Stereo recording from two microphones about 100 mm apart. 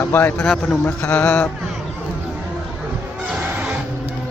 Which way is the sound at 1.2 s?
25° left (ahead or behind).